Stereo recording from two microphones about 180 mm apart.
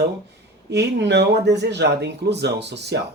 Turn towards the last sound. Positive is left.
turn(degrees=-70)  # may be behind; listen again after turning